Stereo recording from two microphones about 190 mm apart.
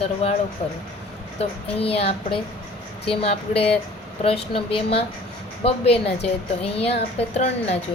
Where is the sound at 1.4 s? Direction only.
30° left (ahead or behind).